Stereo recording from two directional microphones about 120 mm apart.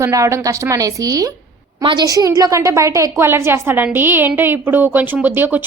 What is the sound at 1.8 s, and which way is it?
A woman's voice, 40° right (ahead or behind).